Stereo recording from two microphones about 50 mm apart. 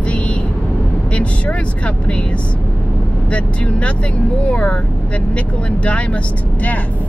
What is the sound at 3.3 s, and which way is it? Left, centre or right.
Speech, left.